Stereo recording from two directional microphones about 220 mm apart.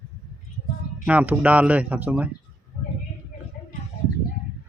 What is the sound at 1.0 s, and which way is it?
Speech, 5° right (ahead or behind).